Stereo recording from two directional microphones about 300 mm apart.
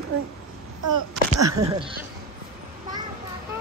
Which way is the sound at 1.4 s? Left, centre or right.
Centre.